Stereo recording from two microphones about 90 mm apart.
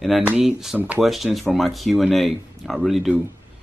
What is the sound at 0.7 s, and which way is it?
Speech, 15° right (ahead or behind).